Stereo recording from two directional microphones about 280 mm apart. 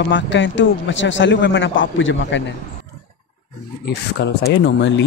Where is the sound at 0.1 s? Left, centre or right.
Left.